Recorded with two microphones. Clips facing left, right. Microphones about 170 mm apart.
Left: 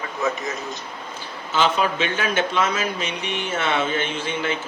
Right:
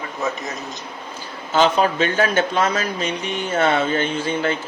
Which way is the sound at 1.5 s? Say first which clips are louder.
Right 4 dB; 40° right (ahead or behind).